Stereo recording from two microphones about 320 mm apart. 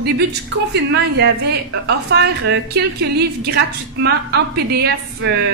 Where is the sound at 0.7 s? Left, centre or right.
Right.